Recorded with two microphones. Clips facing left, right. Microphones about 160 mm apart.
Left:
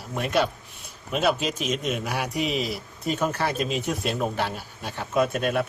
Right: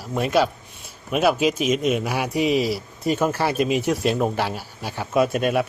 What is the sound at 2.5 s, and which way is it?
Speech, 70° right (ahead or behind).